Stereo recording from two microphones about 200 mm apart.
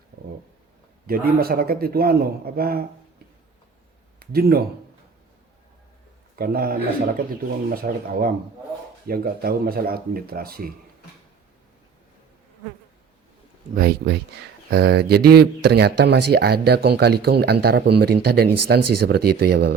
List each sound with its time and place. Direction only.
1.0 s speech: 50° right (ahead or behind)
4.2 s speech: 50° right (ahead or behind)
6.3 s a man's voice: 50° right (ahead or behind)
13.7 s speech: 50° right (ahead or behind)